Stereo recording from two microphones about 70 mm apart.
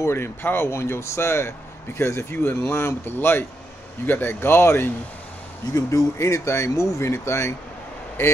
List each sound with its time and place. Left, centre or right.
0.0 s speech: left
5.7 s speech: left